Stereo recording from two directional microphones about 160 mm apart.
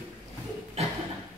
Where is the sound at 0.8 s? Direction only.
40° right (ahead or behind).